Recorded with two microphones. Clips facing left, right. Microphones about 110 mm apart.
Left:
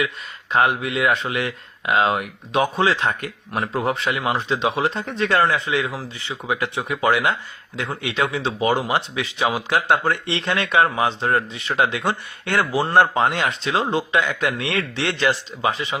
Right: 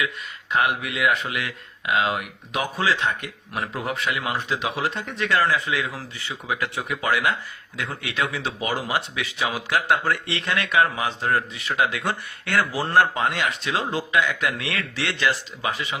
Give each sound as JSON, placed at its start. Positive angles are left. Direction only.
{"t": 0.5, "sound": "speech", "side_deg": 30}